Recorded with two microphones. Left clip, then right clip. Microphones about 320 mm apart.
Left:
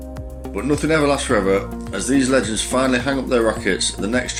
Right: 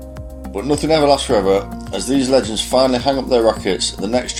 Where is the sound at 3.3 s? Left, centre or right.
Right.